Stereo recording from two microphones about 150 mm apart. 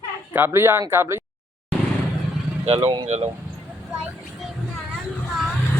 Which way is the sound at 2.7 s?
45° right (ahead or behind).